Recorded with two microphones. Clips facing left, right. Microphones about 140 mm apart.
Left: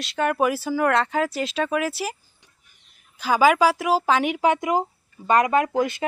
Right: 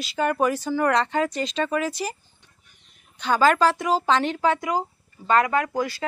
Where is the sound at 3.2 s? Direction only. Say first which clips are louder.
Left 1 dB; 10° left (ahead or behind).